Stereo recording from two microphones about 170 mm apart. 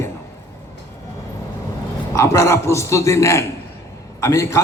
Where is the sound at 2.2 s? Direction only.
15° left (ahead or behind).